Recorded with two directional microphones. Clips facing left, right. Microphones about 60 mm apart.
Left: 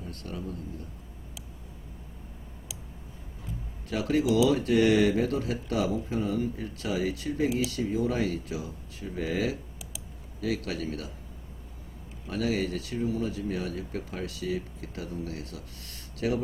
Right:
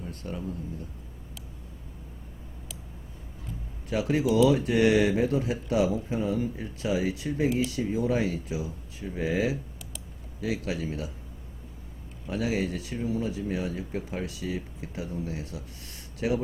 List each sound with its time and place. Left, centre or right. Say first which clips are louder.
0.1 s speech: even; centre
2.7 s a sound: even; centre
3.8 s speech: even; centre
12.3 s speech: even; centre